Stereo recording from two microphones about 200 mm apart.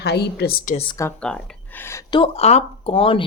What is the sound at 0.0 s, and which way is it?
Speech, 55° left (ahead or behind).